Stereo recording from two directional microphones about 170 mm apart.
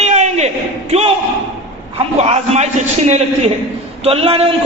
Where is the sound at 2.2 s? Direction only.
40° right (ahead or behind).